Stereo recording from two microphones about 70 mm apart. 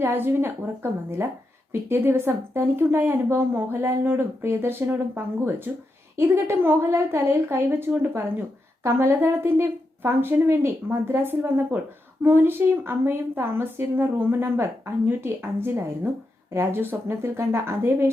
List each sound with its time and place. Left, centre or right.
0.0 s a woman's voice: right